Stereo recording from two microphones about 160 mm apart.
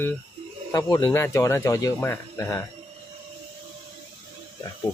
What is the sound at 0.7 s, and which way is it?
Speech, 25° left (ahead or behind).